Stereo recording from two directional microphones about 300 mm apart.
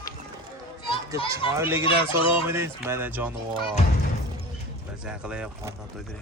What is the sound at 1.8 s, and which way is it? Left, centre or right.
Fowl, centre.